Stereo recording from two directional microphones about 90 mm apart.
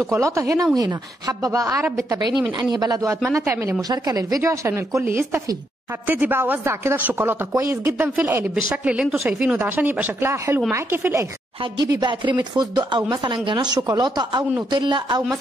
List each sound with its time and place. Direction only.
0.0 s speech: 35° right (ahead or behind)
2.1 s speech: 50° right (ahead or behind)
3.3 s speech: 30° right (ahead or behind)
3.9 s speech: 45° right (ahead or behind)
8.8 s speech: 10° right (ahead or behind)
10.3 s speech: 30° right (ahead or behind)
11.6 s speech: 55° right (ahead or behind)